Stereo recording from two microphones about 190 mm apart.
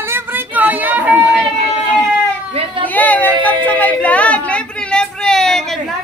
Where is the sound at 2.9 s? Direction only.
10° left (ahead or behind).